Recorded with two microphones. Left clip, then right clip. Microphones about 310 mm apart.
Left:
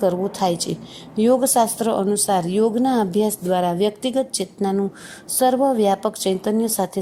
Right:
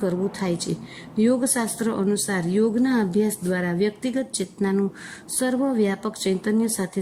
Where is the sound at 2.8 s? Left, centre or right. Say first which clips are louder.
Left 3 dB; centre.